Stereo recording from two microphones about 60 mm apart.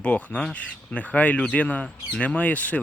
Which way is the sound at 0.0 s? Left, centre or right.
Left.